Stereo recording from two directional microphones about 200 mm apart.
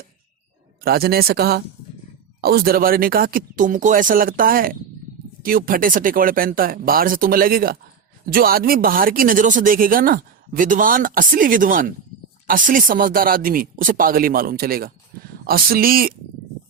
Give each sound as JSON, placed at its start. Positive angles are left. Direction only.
{"t": 0.9, "sound": "speech", "side_deg": -50}